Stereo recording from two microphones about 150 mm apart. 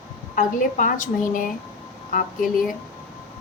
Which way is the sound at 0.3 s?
60° left (ahead or behind).